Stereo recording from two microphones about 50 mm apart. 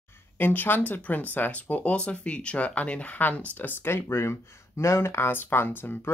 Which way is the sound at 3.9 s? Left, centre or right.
Left.